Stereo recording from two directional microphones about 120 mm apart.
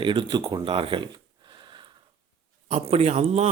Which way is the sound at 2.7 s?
55° right (ahead or behind).